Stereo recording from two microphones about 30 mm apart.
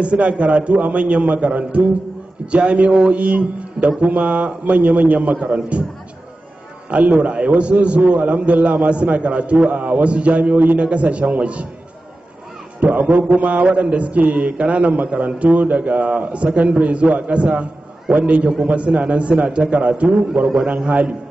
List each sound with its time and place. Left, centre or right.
0.0 s a man's voice: right
6.9 s a man's voice: right
7.3 s a man's voice: right
10.5 s a man's voice: right
10.8 s a man's voice: right
12.8 s a man's voice: right